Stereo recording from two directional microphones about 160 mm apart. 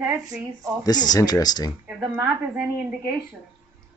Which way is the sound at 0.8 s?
25° left (ahead or behind).